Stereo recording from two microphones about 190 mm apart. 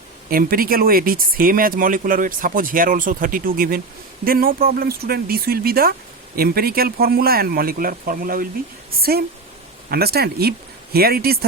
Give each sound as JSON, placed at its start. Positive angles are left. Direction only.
{"t": 0.3, "sound": "speech", "side_deg": -50}